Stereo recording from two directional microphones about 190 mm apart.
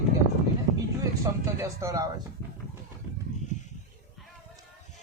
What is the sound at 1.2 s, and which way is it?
Speech, 15° right (ahead or behind).